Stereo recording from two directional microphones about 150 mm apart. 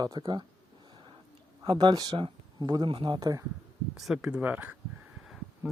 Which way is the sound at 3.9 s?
5° right (ahead or behind).